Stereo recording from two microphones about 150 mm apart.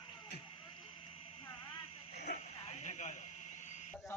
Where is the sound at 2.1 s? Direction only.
50° left (ahead or behind).